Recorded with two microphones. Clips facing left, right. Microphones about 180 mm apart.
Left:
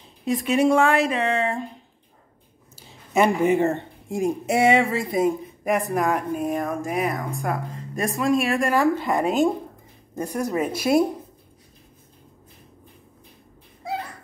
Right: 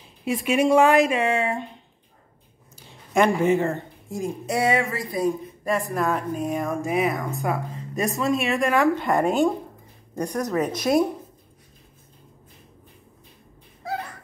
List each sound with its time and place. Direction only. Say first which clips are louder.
0.2 s speech: left 1 dB; 10° right (ahead or behind)
2.7 s a sound: even; 5° left (ahead or behind)
3.5 s speech: left 2 dB; 25° left (ahead or behind)
6.4 s speech: even; centre (ahead or behind)